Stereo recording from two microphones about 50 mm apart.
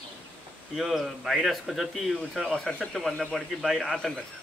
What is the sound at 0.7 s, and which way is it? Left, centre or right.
Speech, centre.